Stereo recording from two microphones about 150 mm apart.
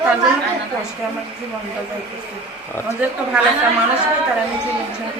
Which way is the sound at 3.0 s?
10° right (ahead or behind).